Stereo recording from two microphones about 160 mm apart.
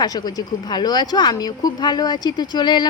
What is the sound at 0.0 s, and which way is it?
Speech, 25° left (ahead or behind).